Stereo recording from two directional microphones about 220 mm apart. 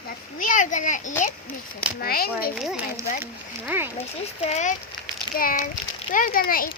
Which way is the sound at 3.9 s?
30° left (ahead or behind).